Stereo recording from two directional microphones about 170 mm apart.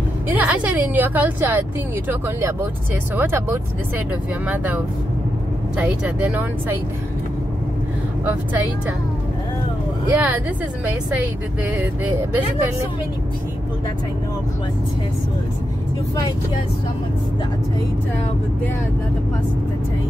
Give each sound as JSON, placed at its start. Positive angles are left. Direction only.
{"t": 0.3, "sound": "speech", "side_deg": -10}
{"t": 8.3, "sound": "speech", "side_deg": -10}
{"t": 10.1, "sound": "speech", "side_deg": -10}
{"t": 11.8, "sound": "speech", "side_deg": -10}